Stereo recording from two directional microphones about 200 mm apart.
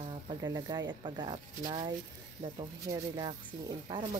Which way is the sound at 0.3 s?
20° right (ahead or behind).